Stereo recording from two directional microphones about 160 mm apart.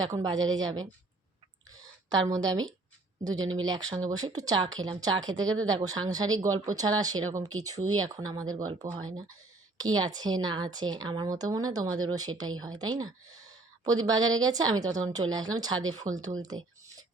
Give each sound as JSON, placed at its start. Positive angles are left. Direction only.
{"t": 0.1, "sound": "speech", "side_deg": -25}
{"t": 1.7, "sound": "a sound", "side_deg": -20}
{"t": 3.2, "sound": "speech", "side_deg": -25}